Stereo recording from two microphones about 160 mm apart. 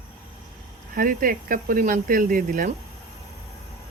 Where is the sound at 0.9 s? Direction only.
60° right (ahead or behind).